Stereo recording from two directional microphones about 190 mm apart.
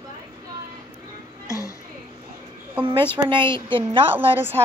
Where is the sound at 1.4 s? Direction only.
15° left (ahead or behind).